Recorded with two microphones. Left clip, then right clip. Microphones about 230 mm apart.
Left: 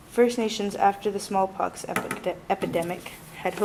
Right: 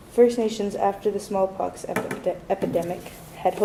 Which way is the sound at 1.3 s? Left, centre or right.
Left.